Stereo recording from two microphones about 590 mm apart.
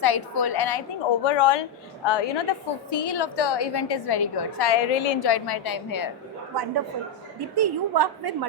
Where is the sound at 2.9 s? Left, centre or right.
Left.